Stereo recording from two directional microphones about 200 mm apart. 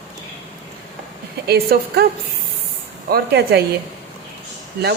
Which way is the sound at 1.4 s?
50° right (ahead or behind).